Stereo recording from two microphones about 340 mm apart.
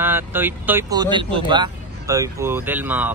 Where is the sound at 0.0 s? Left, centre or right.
Centre.